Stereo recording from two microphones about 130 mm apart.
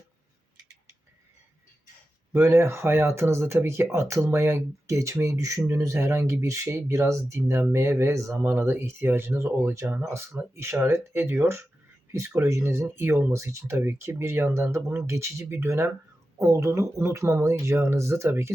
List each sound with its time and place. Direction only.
2.3 s speech: 20° right (ahead or behind)